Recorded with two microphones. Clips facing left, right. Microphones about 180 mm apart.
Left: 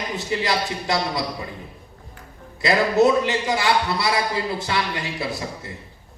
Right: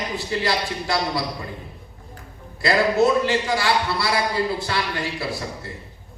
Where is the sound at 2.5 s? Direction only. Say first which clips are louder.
Left 1 dB; 20° left (ahead or behind).